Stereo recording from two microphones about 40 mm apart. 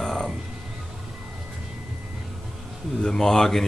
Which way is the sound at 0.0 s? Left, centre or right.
Centre.